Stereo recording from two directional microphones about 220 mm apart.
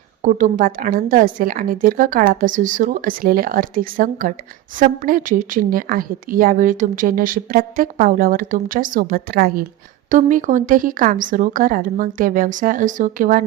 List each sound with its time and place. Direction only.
0.2 s a woman's voice: 35° right (ahead or behind)